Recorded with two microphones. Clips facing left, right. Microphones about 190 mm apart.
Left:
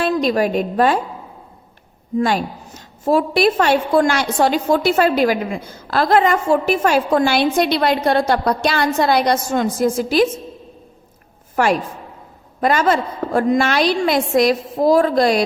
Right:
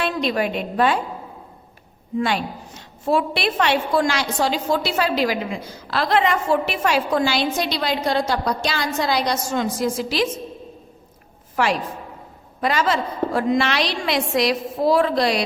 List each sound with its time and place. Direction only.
0.0 s a woman's voice: 45° left (ahead or behind)
2.1 s a woman's voice: 45° left (ahead or behind)
11.5 s a woman's voice: 50° left (ahead or behind)